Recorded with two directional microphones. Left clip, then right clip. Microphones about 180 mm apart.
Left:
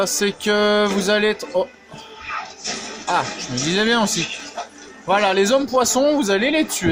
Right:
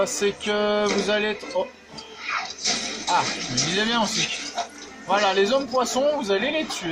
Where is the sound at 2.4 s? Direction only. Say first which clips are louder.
Right 2 dB; centre (ahead or behind).